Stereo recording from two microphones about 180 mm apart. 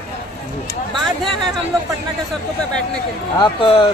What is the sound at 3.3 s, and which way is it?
Speech, 25° left (ahead or behind).